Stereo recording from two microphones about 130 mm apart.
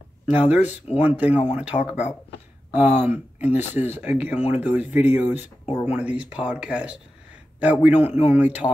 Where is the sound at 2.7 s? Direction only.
15° right (ahead or behind).